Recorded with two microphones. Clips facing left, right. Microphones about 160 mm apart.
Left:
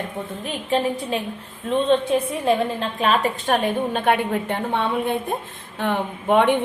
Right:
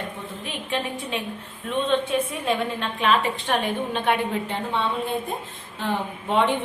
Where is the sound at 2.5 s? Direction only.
35° left (ahead or behind).